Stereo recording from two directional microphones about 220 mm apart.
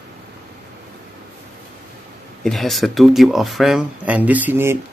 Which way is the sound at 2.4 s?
Centre (ahead or behind).